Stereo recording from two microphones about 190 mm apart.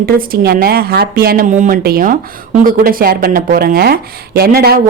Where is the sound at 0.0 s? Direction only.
50° right (ahead or behind).